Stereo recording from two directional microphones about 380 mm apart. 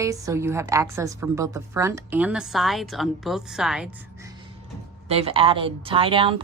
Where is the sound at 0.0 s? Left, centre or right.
Centre.